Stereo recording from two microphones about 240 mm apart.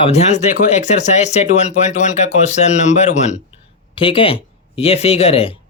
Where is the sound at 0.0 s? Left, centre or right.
Left.